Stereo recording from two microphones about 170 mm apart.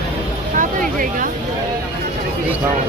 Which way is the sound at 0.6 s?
50° right (ahead or behind).